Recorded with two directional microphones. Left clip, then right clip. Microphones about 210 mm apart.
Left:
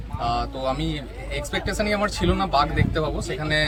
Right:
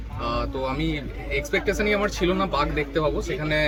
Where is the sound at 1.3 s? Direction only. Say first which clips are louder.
Right 4 dB; 15° left (ahead or behind).